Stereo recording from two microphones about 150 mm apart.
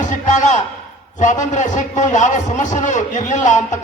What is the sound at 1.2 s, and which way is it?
A man's voice, 55° left (ahead or behind).